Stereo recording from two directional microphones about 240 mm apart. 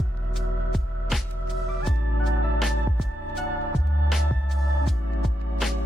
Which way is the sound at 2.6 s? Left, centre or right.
Centre.